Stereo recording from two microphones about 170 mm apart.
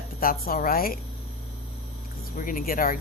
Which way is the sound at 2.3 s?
55° left (ahead or behind).